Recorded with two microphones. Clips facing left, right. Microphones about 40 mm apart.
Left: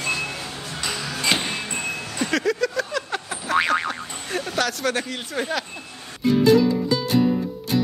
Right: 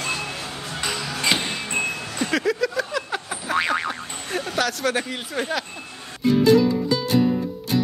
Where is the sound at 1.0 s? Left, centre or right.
Centre.